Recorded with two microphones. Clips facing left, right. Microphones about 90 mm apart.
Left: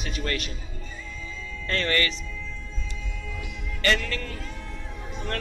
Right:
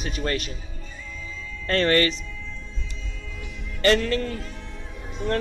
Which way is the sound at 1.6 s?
40° right (ahead or behind).